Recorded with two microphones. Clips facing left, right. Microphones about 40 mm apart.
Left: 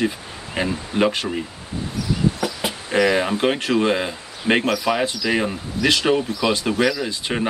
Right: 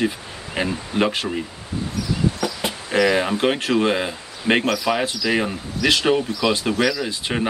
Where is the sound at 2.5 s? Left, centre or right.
Centre.